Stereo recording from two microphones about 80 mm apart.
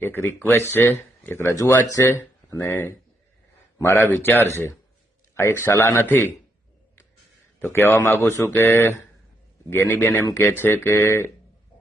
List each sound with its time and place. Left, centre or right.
0.0 s speech: left
3.8 s speech: left
7.6 s a man's voice: left